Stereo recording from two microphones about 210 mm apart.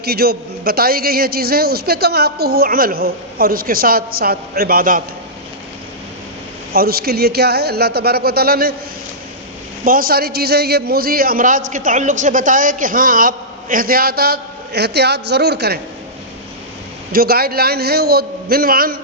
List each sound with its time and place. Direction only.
0.0 s a man's voice: 45° right (ahead or behind)
6.7 s a man's voice: 45° right (ahead or behind)
9.8 s a man's voice: 45° right (ahead or behind)
17.1 s a man's voice: 45° right (ahead or behind)